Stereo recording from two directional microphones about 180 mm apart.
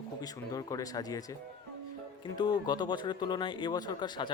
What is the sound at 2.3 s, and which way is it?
Speech, 25° left (ahead or behind).